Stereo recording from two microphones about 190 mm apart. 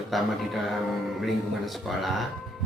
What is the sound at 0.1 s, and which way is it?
Speech, centre (ahead or behind).